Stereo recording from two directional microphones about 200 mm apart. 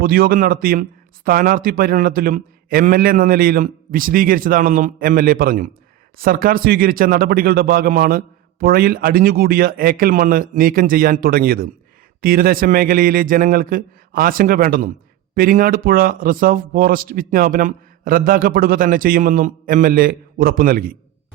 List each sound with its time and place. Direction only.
0.0 s speech: 50° right (ahead or behind)